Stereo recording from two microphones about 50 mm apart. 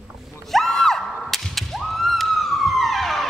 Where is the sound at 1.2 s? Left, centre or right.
Centre.